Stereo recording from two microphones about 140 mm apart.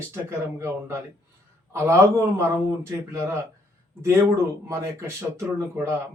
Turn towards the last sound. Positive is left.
turn(degrees=-20)  # may be behind; listen again after turning